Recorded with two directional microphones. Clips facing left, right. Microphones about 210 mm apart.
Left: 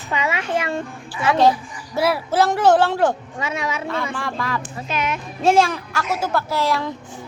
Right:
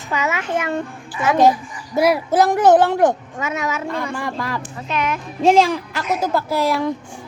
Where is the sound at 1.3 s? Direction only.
15° right (ahead or behind).